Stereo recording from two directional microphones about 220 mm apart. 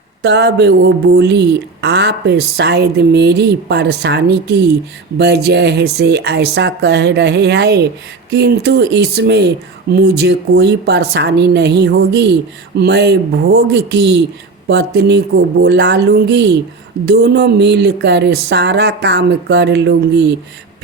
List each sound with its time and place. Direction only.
0.2 s a woman's voice: 50° right (ahead or behind)